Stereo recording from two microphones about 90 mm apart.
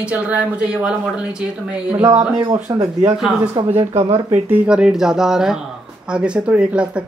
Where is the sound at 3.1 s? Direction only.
5° right (ahead or behind).